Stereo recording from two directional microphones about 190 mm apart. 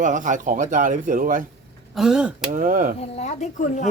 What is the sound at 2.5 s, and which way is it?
Speech, 45° right (ahead or behind).